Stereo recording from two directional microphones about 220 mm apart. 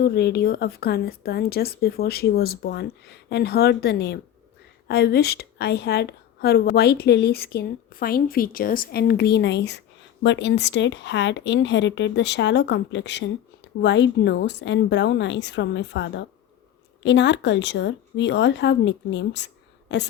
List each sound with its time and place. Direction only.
0.0 s a woman's voice: 50° left (ahead or behind)